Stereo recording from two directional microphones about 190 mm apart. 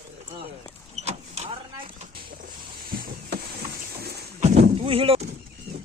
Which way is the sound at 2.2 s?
50° right (ahead or behind).